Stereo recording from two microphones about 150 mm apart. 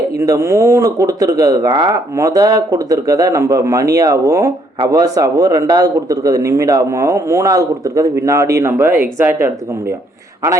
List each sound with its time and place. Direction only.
0.2 s a man's voice: 20° right (ahead or behind)